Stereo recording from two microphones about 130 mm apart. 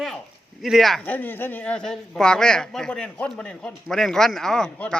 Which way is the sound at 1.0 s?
15° left (ahead or behind).